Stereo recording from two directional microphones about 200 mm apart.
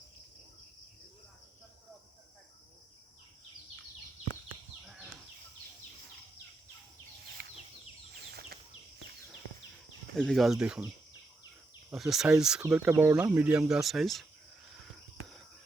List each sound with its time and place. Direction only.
7.4 s a sound: 55° right (ahead or behind)
8.3 s bird flight: 50° right (ahead or behind)
10.2 s speech: centre (ahead or behind)
11.9 s speech: centre (ahead or behind)